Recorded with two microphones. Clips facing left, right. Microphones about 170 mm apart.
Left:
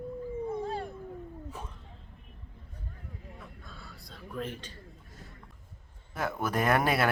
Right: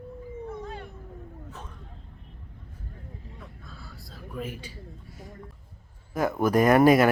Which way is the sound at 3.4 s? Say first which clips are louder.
Right 2 dB; centre (ahead or behind).